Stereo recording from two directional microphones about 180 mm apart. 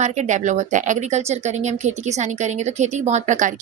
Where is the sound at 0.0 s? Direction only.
40° right (ahead or behind).